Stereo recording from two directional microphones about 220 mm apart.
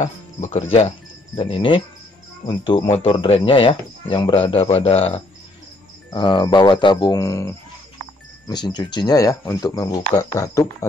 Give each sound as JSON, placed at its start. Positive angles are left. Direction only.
{"t": 0.4, "sound": "speech", "side_deg": 30}